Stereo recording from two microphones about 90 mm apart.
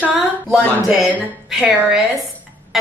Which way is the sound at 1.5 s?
5° right (ahead or behind).